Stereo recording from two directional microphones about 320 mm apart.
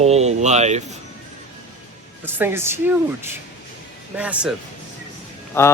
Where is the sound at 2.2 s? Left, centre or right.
Centre.